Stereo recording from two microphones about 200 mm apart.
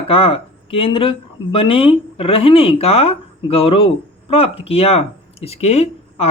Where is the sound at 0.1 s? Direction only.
30° left (ahead or behind).